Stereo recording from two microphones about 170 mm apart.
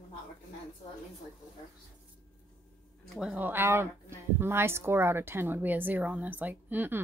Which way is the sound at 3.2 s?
5° right (ahead or behind).